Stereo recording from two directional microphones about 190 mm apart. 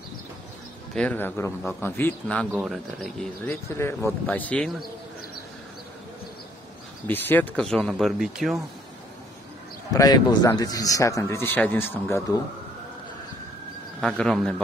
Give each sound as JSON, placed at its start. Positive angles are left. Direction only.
{"t": 0.9, "sound": "speech", "side_deg": 10}
{"t": 2.5, "sound": "speech", "side_deg": -5}
{"t": 3.4, "sound": "speech", "side_deg": 15}
{"t": 7.1, "sound": "speech", "side_deg": 10}
{"t": 9.9, "sound": "speech", "side_deg": 20}
{"t": 14.0, "sound": "speech", "side_deg": 5}